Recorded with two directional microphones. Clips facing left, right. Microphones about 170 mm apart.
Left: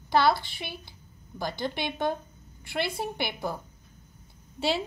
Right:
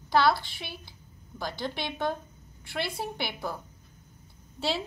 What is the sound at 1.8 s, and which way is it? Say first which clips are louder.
Speech: left 2 dB; 20° left (ahead or behind).